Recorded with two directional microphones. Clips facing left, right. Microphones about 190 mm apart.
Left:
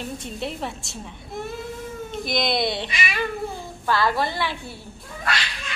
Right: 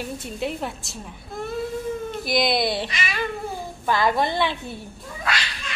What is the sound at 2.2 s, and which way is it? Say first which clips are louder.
Speech: right 2 dB; 5° right (ahead or behind).